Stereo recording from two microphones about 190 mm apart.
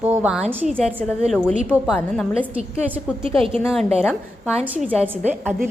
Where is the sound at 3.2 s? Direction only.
30° right (ahead or behind).